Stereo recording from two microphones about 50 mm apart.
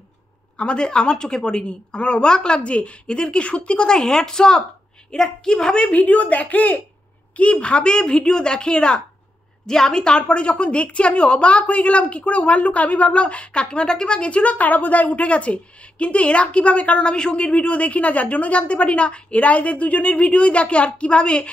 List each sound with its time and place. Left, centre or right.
0.6 s a woman's voice: centre